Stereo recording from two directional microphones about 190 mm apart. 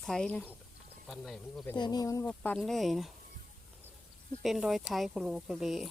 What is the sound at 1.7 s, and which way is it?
Speech, 20° left (ahead or behind).